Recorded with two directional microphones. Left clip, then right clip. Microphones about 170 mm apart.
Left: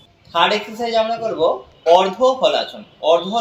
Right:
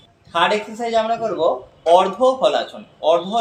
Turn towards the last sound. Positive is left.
turn(degrees=15)  # may be behind; listen again after turning